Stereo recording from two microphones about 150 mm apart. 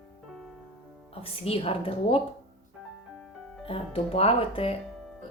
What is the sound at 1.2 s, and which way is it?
Speech, 40° left (ahead or behind).